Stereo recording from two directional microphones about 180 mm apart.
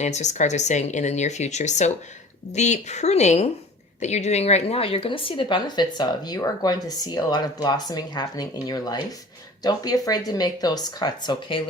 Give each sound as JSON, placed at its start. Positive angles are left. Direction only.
{"t": 0.0, "sound": "a woman's voice", "side_deg": 40}